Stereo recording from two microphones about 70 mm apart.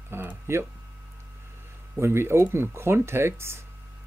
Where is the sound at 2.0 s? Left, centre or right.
Right.